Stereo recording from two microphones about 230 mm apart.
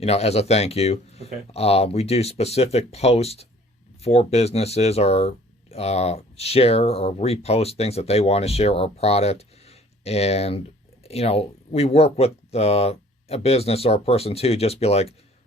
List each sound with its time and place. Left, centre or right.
0.0 s speech: left